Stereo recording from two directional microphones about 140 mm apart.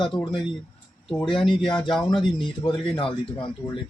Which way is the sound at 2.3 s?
35° left (ahead or behind).